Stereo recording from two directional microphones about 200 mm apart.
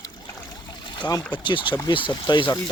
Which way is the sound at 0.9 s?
20° left (ahead or behind).